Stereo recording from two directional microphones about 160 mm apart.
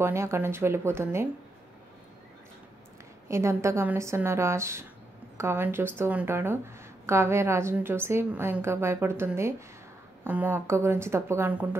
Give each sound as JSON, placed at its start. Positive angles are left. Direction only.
{"t": 0.0, "sound": "speech", "side_deg": -15}
{"t": 3.3, "sound": "speech", "side_deg": -20}